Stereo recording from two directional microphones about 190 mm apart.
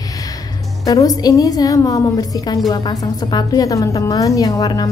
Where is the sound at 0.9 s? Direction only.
20° left (ahead or behind).